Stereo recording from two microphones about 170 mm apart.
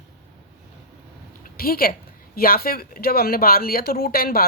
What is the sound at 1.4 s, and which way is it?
A woman's voice, 60° left (ahead or behind).